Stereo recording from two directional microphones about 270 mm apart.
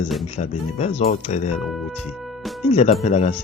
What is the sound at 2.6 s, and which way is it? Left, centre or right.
Speech, left.